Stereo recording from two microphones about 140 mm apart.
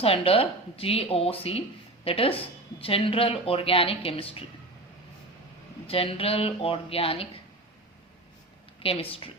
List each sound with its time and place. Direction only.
0.0 s a woman's voice: 45° left (ahead or behind)
5.9 s a woman's voice: 40° left (ahead or behind)
8.8 s speech: 40° left (ahead or behind)